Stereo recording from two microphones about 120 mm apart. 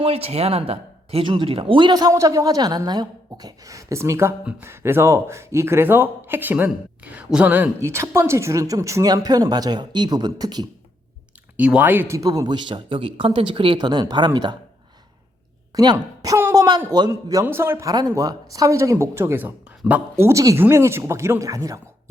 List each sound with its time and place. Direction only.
0.0 s speech: 55° right (ahead or behind); by 10.7 s 35° right (ahead or behind)
11.5 s speech: 10° right (ahead or behind); by 14.5 s 40° right (ahead or behind)
15.7 s speech: 30° right (ahead or behind)
16.4 s a sound: 25° right (ahead or behind)
17.1 s speech: 30° right (ahead or behind)